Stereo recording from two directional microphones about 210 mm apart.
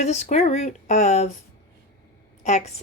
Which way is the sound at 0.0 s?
35° left (ahead or behind).